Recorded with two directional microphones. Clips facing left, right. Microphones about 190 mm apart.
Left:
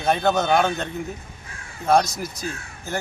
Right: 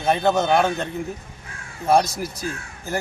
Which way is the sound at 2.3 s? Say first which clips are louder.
Right 2 dB; 30° right (ahead or behind).